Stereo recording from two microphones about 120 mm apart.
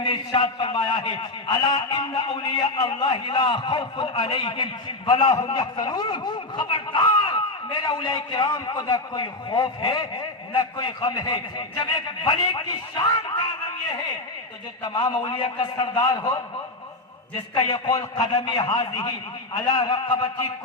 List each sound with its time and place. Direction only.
0.0 s a man's voice: 40° left (ahead or behind)
14.9 s a man's voice: 35° left (ahead or behind)
17.5 s a man's voice: 40° left (ahead or behind)